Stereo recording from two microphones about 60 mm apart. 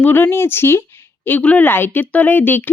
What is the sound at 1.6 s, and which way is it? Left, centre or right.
Speech, left.